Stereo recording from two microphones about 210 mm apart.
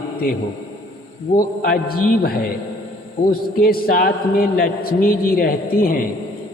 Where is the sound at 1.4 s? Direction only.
45° left (ahead or behind).